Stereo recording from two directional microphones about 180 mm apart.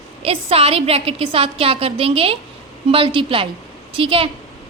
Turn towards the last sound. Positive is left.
turn(degrees=-30)  # may be behind; listen again after turning